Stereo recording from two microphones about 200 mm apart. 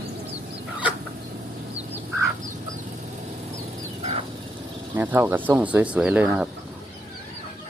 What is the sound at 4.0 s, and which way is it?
Vehicle, 30° right (ahead or behind).